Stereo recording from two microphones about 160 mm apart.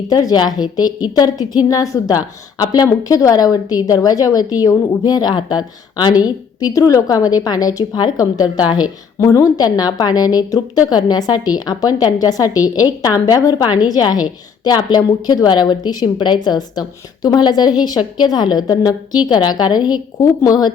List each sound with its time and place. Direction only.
0.1 s a woman's voice: 25° left (ahead or behind)